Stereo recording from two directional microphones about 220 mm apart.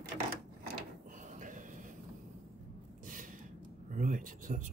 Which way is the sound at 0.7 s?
35° right (ahead or behind).